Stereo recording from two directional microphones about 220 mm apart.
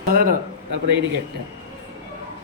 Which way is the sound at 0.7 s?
50° right (ahead or behind).